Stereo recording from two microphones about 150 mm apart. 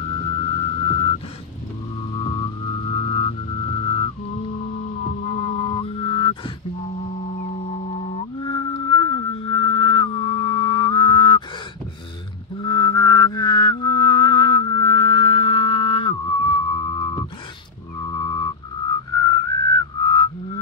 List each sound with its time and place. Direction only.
0.6 s music: 35° left (ahead or behind)
2.1 s music: 35° left (ahead or behind)
5.2 s music: 35° left (ahead or behind)
7.4 s music: 40° left (ahead or behind)
12.6 s music: 25° left (ahead or behind)
18.1 s whistling: 25° left (ahead or behind)